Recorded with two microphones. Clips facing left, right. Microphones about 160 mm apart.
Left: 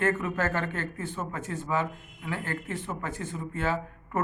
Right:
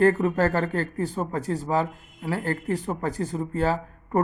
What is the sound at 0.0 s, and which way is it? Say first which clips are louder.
Speech: right 8 dB; 35° right (ahead or behind).